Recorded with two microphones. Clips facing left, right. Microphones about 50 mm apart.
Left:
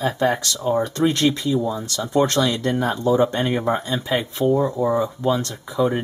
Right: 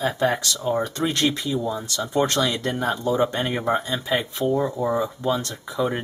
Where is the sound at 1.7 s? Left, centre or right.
Centre.